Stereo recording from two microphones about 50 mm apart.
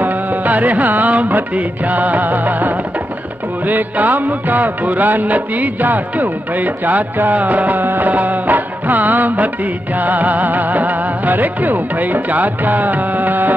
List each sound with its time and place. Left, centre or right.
0.0 s music: right